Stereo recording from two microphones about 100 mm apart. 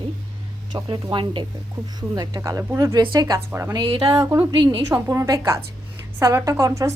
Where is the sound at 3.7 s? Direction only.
55° right (ahead or behind).